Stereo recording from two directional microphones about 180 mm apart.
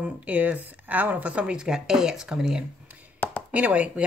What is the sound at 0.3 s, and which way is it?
Speech, 10° right (ahead or behind).